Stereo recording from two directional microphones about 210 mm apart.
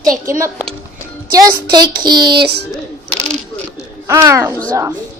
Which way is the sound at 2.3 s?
50° right (ahead or behind).